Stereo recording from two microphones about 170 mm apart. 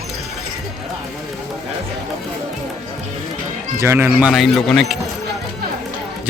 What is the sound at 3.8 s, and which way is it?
A child's voice, 15° right (ahead or behind).